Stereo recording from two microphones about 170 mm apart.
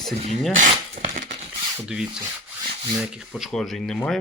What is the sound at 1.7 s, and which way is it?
Speech, 5° right (ahead or behind).